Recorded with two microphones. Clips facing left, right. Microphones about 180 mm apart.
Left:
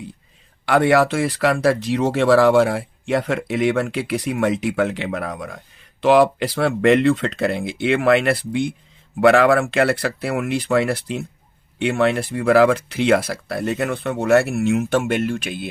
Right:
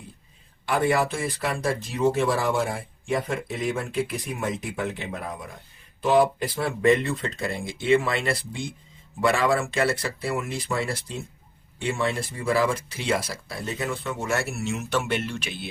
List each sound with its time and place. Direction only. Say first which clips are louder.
0.6 s speech: left 7 dB; 85° left
6.0 s speech: left 6 dB; 90° left; by 15.7 s 50° left (ahead or behind)